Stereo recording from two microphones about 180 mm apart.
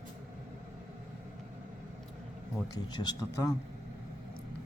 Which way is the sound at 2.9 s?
20° left (ahead or behind).